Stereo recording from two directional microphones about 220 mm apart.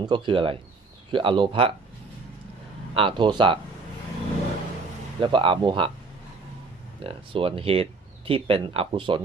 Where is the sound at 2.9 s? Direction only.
20° right (ahead or behind).